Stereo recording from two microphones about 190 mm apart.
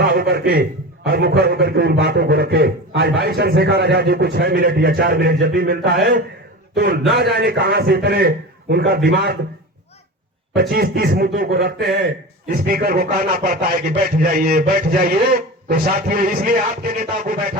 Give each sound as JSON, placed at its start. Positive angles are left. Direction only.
{"t": 0.0, "sound": "a man's voice", "side_deg": -55}
{"t": 10.5, "sound": "a man's voice", "side_deg": -60}